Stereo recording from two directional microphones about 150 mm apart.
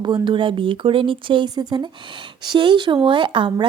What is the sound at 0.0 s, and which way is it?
Speech, 30° right (ahead or behind).